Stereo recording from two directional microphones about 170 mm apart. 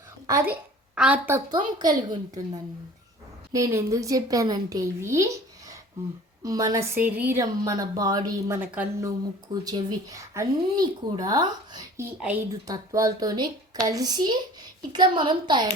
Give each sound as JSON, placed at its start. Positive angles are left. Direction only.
{"t": 0.3, "sound": "a woman's voice", "side_deg": -15}
{"t": 1.5, "sound": "a woman's voice", "side_deg": -25}
{"t": 7.6, "sound": "speech", "side_deg": -20}
{"t": 9.6, "sound": "speech", "side_deg": -25}
{"t": 12.2, "sound": "a woman's voice", "side_deg": -10}
{"t": 12.6, "sound": "speech", "side_deg": -20}